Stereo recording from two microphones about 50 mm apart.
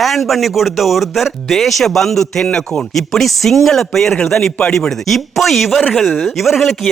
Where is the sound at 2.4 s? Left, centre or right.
Centre.